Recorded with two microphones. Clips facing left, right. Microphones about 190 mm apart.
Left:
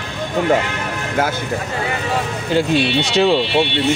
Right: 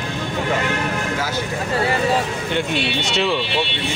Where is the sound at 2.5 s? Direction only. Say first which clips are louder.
Left 7 dB; 35° left (ahead or behind).